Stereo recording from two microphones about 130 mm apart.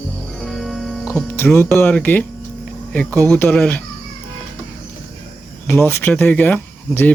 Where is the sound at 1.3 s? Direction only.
20° left (ahead or behind).